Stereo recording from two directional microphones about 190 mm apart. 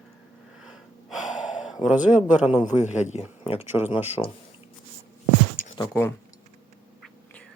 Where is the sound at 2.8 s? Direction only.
35° left (ahead or behind).